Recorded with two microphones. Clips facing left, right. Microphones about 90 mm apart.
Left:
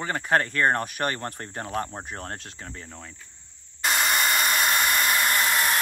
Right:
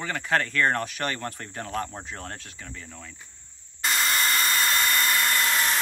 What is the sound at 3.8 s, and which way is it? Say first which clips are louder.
Hair dryer: left 2 dB; 15° left (ahead or behind).